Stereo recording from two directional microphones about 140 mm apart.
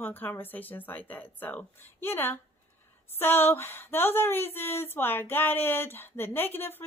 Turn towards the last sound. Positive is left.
turn(degrees=15)  # may be behind; listen again after turning